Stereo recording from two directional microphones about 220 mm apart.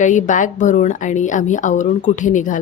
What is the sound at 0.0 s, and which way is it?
A woman's voice, 35° left (ahead or behind).